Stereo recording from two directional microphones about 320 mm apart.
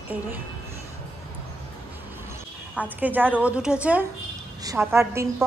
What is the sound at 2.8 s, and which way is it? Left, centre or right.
A woman's voice, centre.